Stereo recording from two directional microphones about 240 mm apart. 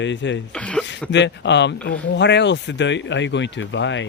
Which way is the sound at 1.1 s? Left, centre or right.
Left.